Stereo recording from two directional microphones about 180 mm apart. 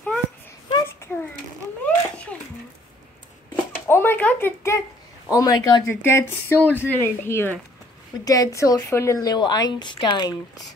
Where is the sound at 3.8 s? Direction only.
15° left (ahead or behind).